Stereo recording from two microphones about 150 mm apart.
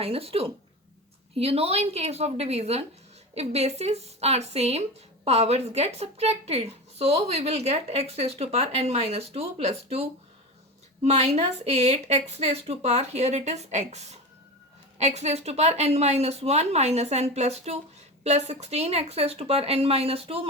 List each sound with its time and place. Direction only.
0.0 s speech: 40° right (ahead or behind)